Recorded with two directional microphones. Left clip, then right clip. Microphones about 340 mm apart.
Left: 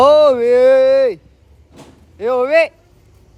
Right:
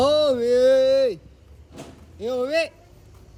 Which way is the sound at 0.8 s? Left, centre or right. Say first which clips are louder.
Left 7 dB; centre.